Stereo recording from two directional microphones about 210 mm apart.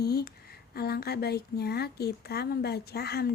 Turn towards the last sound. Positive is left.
turn(degrees=50)  # may be behind; listen again after turning